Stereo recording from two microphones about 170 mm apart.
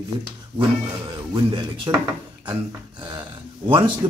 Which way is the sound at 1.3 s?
25° right (ahead or behind).